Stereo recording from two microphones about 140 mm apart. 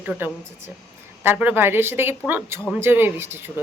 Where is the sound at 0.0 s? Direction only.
15° right (ahead or behind).